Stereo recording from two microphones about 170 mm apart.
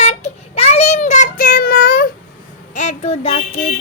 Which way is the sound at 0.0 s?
40° left (ahead or behind).